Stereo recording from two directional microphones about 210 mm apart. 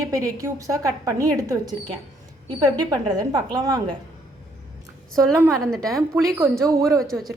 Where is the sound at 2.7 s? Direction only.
20° right (ahead or behind).